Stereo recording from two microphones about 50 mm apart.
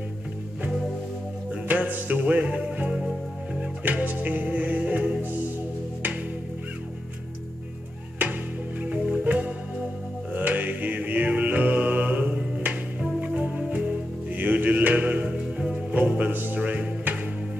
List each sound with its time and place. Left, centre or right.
1.5 s music: right
3.8 s music: right
8.2 s music: right
8.8 s music: right
10.3 s mantra: right
15.9 s music: right